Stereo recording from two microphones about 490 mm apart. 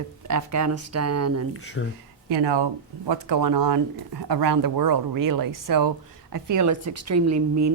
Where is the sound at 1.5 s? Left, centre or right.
Left.